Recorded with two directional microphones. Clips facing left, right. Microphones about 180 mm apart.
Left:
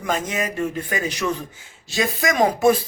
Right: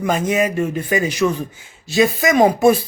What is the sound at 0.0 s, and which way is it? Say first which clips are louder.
Speech: right 6 dB; 10° right (ahead or behind).